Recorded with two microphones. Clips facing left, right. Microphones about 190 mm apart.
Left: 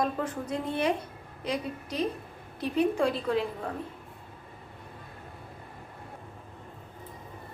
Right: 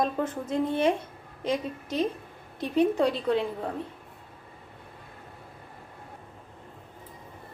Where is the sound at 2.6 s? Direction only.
20° right (ahead or behind).